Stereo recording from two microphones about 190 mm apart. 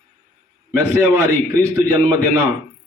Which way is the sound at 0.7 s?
15° right (ahead or behind).